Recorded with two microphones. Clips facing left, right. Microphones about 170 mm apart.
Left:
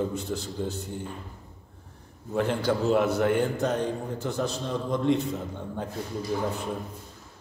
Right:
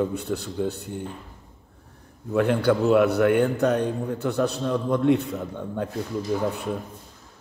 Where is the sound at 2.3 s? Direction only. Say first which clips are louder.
Right 5 dB; 60° right (ahead or behind).